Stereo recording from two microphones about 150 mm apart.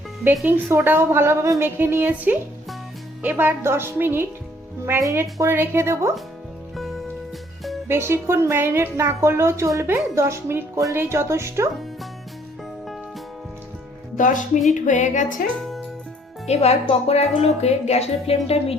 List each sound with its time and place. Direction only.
0.4 s a woman's voice: 10° right (ahead or behind)
6.7 s music: centre (ahead or behind)
7.9 s a woman's voice: 15° right (ahead or behind)
14.2 s music: 60° left (ahead or behind)
16.5 s speech: 45° left (ahead or behind)